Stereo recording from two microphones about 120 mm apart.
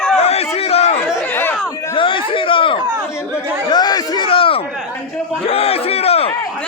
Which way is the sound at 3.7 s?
35° left (ahead or behind).